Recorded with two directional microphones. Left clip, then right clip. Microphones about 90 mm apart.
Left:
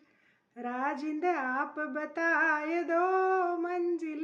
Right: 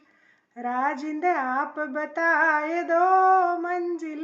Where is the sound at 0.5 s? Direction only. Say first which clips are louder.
Right 8 dB; 20° left (ahead or behind).